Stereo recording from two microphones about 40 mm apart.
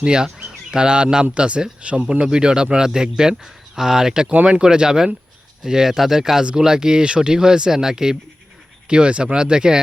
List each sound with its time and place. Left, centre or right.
0.0 s speech: right
8.9 s speech: right